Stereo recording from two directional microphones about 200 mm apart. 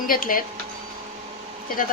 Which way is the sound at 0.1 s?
45° left (ahead or behind).